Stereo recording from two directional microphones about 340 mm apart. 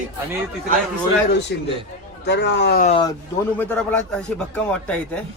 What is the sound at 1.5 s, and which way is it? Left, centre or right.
A man's voice, left.